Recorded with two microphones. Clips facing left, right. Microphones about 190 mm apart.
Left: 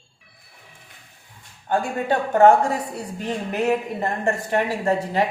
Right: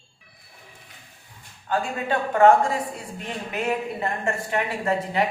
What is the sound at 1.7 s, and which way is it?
A woman's voice, 45° left (ahead or behind).